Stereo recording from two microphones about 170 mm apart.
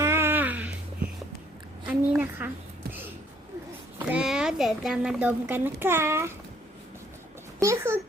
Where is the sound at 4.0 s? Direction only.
5° right (ahead or behind).